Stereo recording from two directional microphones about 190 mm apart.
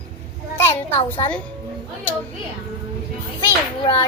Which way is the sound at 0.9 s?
25° left (ahead or behind).